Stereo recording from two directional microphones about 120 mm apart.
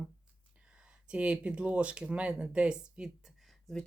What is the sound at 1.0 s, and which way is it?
Speech, 10° right (ahead or behind).